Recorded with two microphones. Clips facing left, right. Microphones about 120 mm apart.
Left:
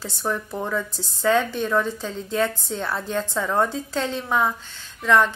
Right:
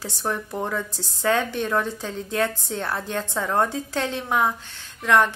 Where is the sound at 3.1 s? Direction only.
15° right (ahead or behind).